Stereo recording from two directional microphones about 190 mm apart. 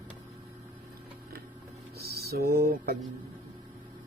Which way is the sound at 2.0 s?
55° right (ahead or behind).